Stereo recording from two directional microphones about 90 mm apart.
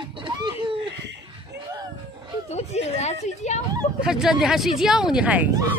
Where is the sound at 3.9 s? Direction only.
10° right (ahead or behind).